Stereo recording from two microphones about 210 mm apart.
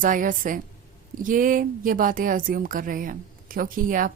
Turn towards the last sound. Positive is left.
turn(degrees=-40)  # may be behind; listen again after turning